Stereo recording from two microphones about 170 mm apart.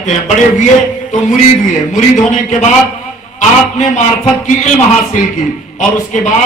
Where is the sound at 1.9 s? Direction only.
40° left (ahead or behind).